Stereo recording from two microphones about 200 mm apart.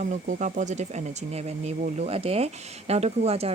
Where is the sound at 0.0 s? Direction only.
35° right (ahead or behind).